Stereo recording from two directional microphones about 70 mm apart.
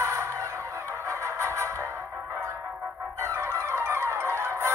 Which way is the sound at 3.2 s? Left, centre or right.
Right.